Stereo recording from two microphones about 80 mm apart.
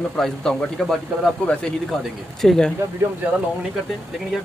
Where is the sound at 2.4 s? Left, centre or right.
Centre.